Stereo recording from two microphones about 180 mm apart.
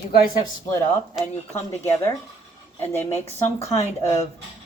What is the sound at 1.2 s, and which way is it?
Speech, centre (ahead or behind).